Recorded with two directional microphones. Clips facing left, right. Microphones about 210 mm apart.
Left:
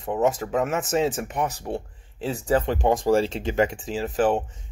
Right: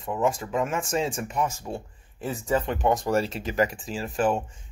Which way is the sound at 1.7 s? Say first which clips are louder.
Left 4 dB; 15° left (ahead or behind).